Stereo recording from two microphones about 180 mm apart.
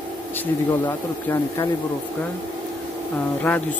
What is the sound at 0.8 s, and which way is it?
Speech, 15° left (ahead or behind).